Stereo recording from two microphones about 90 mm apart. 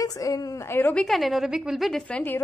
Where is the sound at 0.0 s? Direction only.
40° left (ahead or behind).